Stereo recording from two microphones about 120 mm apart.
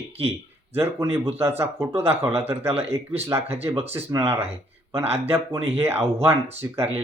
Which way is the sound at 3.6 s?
60° right (ahead or behind).